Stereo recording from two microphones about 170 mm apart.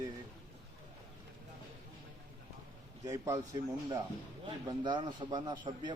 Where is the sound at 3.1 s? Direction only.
20° right (ahead or behind).